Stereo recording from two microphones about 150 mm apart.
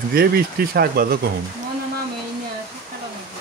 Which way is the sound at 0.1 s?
85° right.